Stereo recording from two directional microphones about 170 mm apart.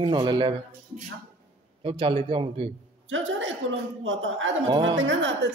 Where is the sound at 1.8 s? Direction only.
35° right (ahead or behind).